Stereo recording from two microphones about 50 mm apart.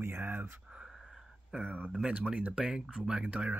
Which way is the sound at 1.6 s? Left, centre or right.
Right.